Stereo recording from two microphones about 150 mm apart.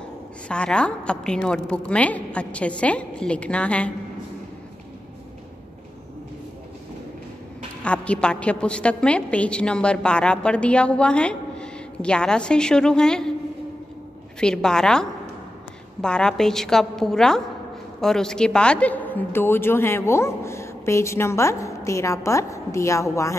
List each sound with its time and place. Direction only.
0.5 s a woman's voice: 5° left (ahead or behind)
7.8 s a woman's voice: 10° left (ahead or behind)
14.4 s a woman's voice: 5° left (ahead or behind); by 23.3 s 20° left (ahead or behind)